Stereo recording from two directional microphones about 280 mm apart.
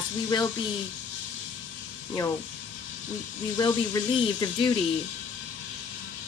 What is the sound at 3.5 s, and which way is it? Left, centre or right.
Speech, centre.